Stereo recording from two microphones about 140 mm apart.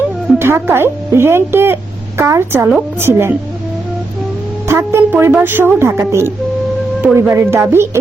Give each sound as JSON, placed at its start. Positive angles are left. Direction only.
{"t": 0.3, "sound": "speech", "side_deg": -15}
{"t": 4.7, "sound": "speech", "side_deg": -20}